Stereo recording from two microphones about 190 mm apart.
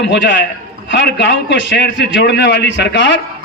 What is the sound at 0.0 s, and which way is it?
A man's voice, 65° left (ahead or behind).